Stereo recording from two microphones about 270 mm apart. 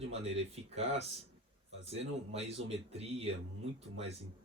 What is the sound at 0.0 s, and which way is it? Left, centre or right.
Speech, right.